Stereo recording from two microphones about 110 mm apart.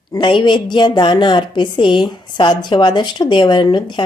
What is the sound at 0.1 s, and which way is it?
A woman's voice, 45° left (ahead or behind).